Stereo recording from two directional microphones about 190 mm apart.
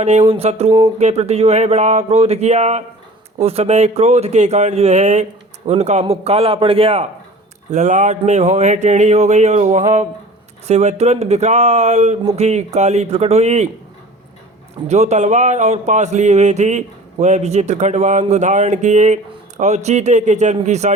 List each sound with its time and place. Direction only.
0.0 s speech: 35° right (ahead or behind)
14.8 s speech: 35° right (ahead or behind)